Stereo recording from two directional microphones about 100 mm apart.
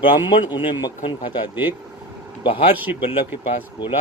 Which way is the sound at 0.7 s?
50° left (ahead or behind).